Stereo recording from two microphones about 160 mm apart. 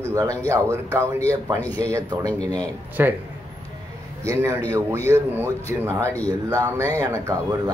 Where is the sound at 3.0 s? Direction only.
10° right (ahead or behind).